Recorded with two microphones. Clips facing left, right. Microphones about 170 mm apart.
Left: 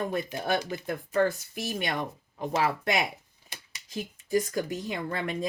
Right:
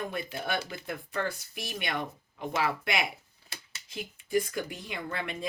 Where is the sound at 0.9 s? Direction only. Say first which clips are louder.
Left 9 dB; 40° left (ahead or behind).